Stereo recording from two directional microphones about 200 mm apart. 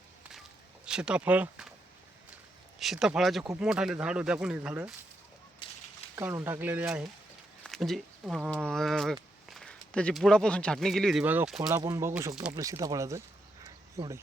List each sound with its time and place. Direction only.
0.9 s speech: 5° right (ahead or behind)
2.7 s speech: centre (ahead or behind)
5.6 s a sound: 25° left (ahead or behind)
6.1 s speech: 10° right (ahead or behind)